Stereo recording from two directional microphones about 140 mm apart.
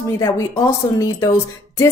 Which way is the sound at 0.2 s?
20° left (ahead or behind).